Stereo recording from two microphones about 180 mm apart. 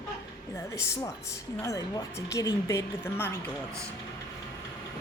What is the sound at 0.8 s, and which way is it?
Speech, 15° left (ahead or behind).